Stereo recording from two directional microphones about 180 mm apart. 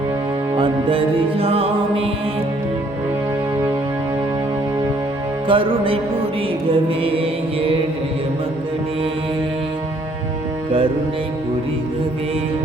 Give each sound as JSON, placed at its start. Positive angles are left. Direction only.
{"t": 0.5, "sound": "music", "side_deg": -30}
{"t": 5.5, "sound": "music", "side_deg": -30}